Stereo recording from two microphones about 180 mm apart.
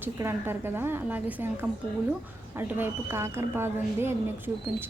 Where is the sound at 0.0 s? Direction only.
10° right (ahead or behind).